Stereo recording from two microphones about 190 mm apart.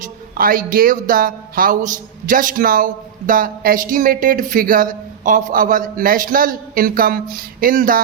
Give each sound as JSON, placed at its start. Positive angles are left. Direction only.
{"t": 0.0, "sound": "speech", "side_deg": -50}